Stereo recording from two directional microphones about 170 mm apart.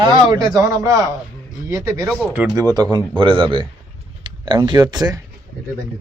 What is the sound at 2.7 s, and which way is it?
Speech, 25° right (ahead or behind).